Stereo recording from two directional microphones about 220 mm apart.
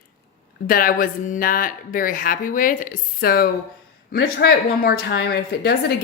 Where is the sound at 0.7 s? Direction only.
40° left (ahead or behind).